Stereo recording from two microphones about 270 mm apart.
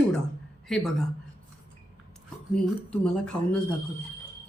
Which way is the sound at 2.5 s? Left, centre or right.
Centre.